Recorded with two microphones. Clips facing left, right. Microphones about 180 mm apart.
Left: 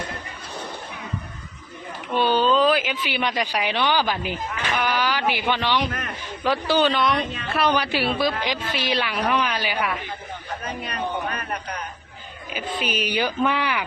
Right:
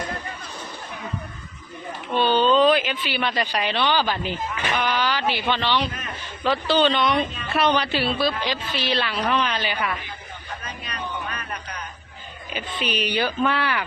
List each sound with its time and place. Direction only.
2.1 s a woman's voice: 10° left (ahead or behind)
10.6 s music: 55° left (ahead or behind)
12.5 s a woman's voice: 5° left (ahead or behind)